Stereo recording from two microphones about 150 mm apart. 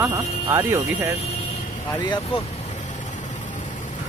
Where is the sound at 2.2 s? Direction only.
45° left (ahead or behind).